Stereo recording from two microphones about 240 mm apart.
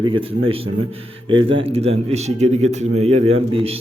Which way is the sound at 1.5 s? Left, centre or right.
Right.